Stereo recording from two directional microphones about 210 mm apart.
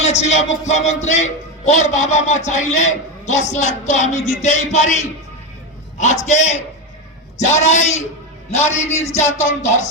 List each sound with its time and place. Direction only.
0.0 s speech: 35° left (ahead or behind)
6.2 s speech: 35° left (ahead or behind)